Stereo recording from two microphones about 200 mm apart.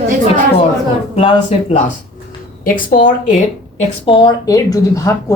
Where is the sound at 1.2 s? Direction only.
30° left (ahead or behind).